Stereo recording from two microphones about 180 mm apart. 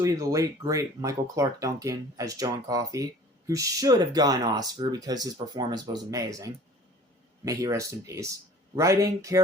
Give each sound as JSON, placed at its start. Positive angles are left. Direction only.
{"t": 0.0, "sound": "speech", "side_deg": -20}